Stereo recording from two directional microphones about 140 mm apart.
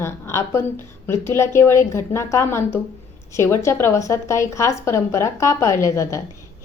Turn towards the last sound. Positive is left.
turn(degrees=20)  # may be behind; listen again after turning